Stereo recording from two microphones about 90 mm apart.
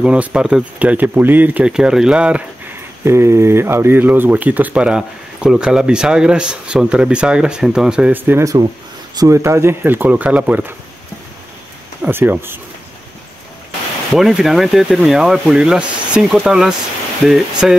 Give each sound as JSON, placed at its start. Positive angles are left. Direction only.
{"t": 0.0, "sound": "speech", "side_deg": -15}
{"t": 1.7, "sound": "speech", "side_deg": -5}
{"t": 3.1, "sound": "speech", "side_deg": -30}
{"t": 8.1, "sound": "speech", "side_deg": -25}
{"t": 9.1, "sound": "speech", "side_deg": -45}
{"t": 9.4, "sound": "speech", "side_deg": -30}
{"t": 12.0, "sound": "speech", "side_deg": -25}
{"t": 14.1, "sound": "speech", "side_deg": -5}